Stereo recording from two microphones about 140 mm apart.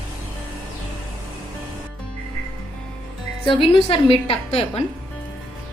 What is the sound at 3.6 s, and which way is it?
A woman's voice, 40° left (ahead or behind).